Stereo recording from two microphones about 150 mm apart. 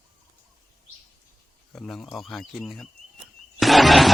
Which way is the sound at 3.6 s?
Centre (ahead or behind).